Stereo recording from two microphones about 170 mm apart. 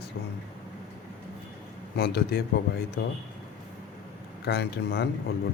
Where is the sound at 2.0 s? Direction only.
70° left (ahead or behind).